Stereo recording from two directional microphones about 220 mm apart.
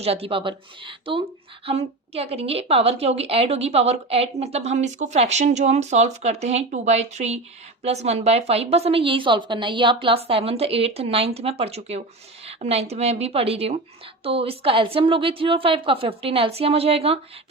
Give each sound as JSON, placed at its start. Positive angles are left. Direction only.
{"t": 0.0, "sound": "speech", "side_deg": -25}